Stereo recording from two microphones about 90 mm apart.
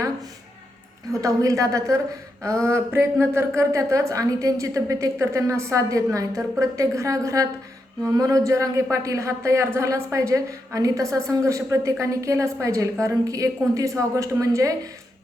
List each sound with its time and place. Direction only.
1.2 s speech: 35° right (ahead or behind)